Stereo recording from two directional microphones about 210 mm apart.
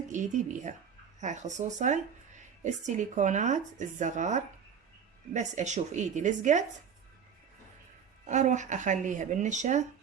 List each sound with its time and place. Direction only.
0.1 s speech: 35° right (ahead or behind)
8.3 s speech: 35° right (ahead or behind)